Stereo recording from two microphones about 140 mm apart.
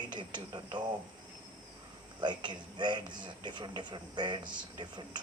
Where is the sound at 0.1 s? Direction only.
35° right (ahead or behind).